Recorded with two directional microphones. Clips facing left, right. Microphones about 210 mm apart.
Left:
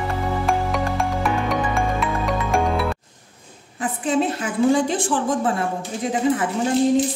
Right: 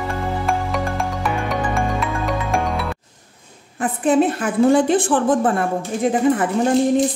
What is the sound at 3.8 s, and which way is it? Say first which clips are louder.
A woman's voice: right 5 dB; 55° right (ahead or behind).